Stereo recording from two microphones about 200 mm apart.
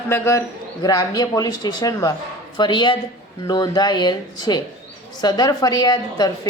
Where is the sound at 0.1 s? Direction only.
15° left (ahead or behind).